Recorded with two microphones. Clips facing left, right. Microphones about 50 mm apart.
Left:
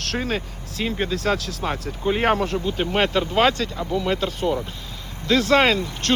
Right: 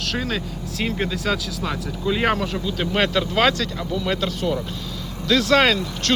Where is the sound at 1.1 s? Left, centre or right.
Left.